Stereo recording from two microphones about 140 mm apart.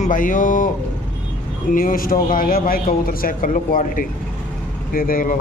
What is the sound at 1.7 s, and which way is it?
Speech, 85° left.